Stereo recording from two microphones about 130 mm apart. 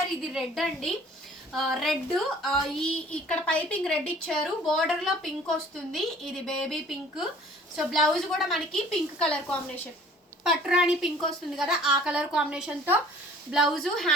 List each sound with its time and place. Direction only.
0.3 s a woman's voice: centre (ahead or behind)
10.4 s a woman's voice: 5° right (ahead or behind)